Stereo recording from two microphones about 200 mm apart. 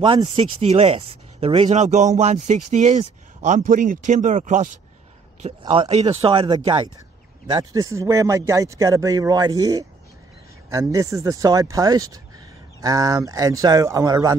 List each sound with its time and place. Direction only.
0.0 s speech: 25° right (ahead or behind)
5.6 s speech: 25° right (ahead or behind)